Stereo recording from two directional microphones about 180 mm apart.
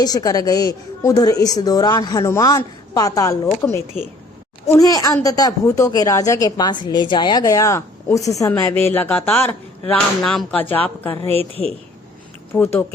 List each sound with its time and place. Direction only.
0.0 s a woman's voice: 20° left (ahead or behind)
12.5 s speech: 15° left (ahead or behind)